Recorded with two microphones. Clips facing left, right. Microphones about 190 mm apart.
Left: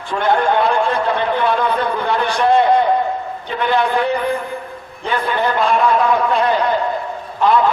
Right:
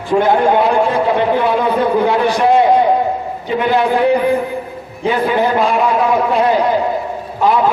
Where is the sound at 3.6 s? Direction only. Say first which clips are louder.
Right 2 dB; 5° right (ahead or behind).